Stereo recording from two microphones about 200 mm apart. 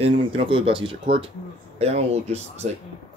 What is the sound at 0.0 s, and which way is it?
Speech, 25° right (ahead or behind).